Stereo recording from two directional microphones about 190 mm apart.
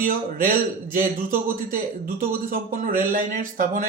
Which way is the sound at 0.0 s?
45° right (ahead or behind).